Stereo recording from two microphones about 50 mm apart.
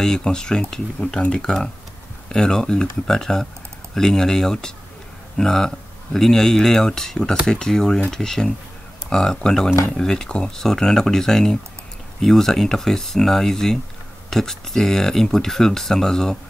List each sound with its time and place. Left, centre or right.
0.0 s speech: centre